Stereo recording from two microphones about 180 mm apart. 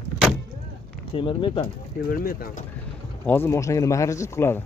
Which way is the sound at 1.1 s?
25° left (ahead or behind).